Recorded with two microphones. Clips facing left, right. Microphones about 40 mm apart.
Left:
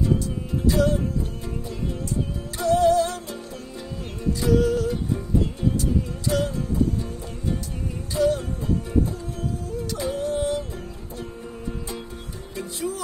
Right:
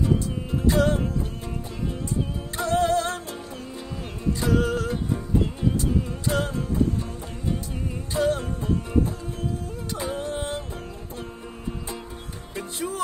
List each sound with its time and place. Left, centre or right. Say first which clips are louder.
0.7 s music: even; right
2.5 s music: left 4 dB; right
6.2 s music: left 2 dB; right
8.1 s music: left 2 dB; right
9.8 s music: left 3 dB; right
12.5 s music: left 1 dB; right